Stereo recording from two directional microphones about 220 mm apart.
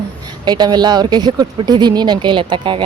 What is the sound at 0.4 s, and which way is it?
Speech, 20° right (ahead or behind).